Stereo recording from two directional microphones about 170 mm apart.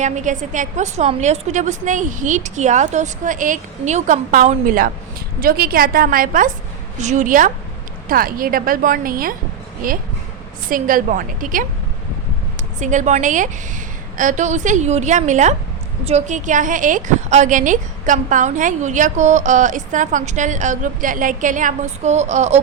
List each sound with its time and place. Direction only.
0.0 s a woman's voice: 45° right (ahead or behind)
12.8 s a woman's voice: 45° right (ahead or behind)